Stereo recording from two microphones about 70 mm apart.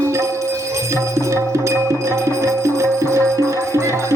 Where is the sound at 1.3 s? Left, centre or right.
Right.